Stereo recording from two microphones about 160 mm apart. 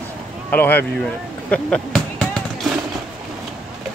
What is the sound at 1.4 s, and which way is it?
Basketball bounce, 5° left (ahead or behind).